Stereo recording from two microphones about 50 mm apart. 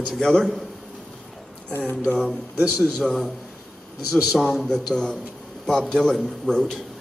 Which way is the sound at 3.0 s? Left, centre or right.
Centre.